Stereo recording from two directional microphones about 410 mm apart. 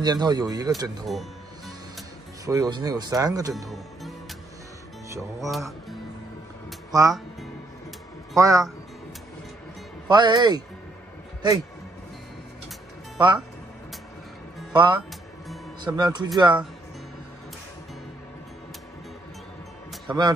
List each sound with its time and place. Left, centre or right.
0.0 s speech: centre
5.1 s speech: centre
8.4 s speech: centre
10.0 s speech: centre
14.7 s speech: centre
20.1 s speech: centre